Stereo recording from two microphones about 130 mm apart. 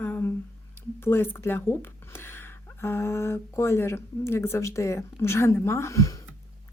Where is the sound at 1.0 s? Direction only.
15° left (ahead or behind).